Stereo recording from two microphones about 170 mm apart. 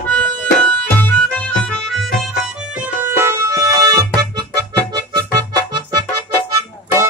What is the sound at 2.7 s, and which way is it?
Music, 10° right (ahead or behind).